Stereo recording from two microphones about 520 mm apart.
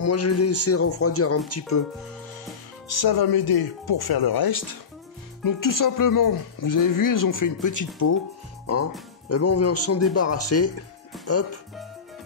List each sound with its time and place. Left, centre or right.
0.0 s speech: left
2.9 s speech: left
9.3 s speech: left